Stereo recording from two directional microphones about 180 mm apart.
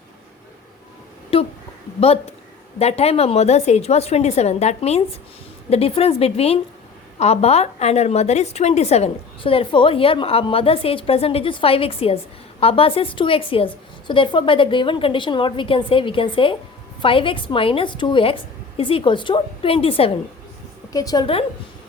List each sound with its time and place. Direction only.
1.3 s a sound: 30° left (ahead or behind)
2.0 s a woman's voice: 35° left (ahead or behind)
20.9 s a woman's voice: 20° left (ahead or behind)